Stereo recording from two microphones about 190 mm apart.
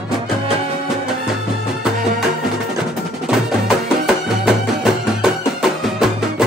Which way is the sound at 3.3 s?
5° right (ahead or behind).